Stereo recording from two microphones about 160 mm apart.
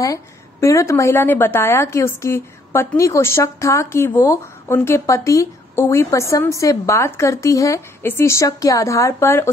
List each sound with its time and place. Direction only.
0.0 s a woman's voice: 20° left (ahead or behind)